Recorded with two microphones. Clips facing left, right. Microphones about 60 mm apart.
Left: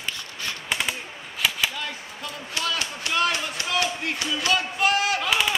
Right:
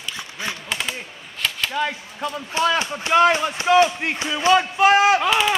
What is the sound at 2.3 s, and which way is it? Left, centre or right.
Speech, right.